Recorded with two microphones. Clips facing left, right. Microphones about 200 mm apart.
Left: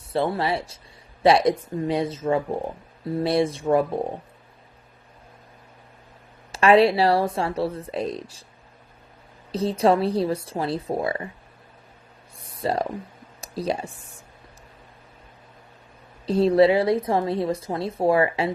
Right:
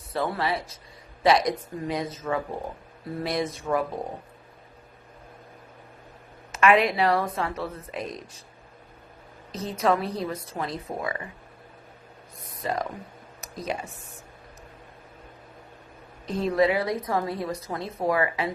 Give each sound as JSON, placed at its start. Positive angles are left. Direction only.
{"t": 0.1, "sound": "a woman's voice", "side_deg": 30}
{"t": 6.5, "sound": "speech", "side_deg": 30}
{"t": 9.5, "sound": "speech", "side_deg": 30}
{"t": 12.4, "sound": "a sound", "side_deg": 30}
{"t": 13.4, "sound": "speech", "side_deg": 30}
{"t": 16.2, "sound": "a woman's voice", "side_deg": 30}